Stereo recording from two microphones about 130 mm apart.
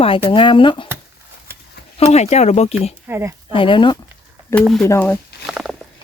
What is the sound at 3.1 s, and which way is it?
Speech, 15° right (ahead or behind).